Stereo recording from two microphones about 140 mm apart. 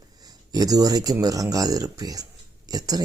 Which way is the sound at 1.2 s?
25° right (ahead or behind).